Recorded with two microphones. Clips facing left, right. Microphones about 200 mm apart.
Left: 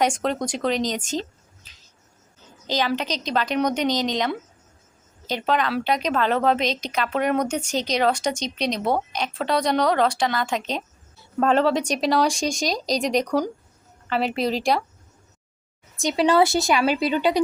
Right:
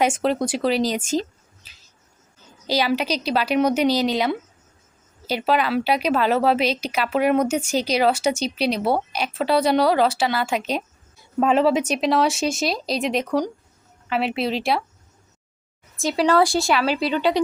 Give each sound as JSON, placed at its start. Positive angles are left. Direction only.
{"t": 0.0, "sound": "a woman's voice", "side_deg": -5}
{"t": 16.0, "sound": "speech", "side_deg": 0}
{"t": 16.4, "sound": "speech", "side_deg": 20}